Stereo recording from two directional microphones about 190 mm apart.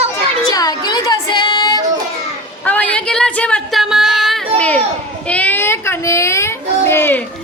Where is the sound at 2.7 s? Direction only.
10° left (ahead or behind).